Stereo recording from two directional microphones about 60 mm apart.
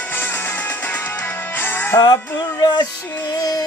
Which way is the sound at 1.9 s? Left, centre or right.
Left.